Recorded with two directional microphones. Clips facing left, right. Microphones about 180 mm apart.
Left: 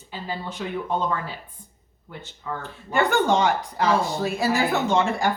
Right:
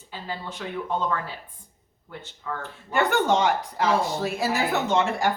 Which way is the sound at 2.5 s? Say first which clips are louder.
Left 1 dB; 15° left (ahead or behind).